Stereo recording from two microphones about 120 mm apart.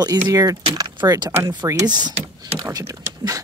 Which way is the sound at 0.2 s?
25° right (ahead or behind).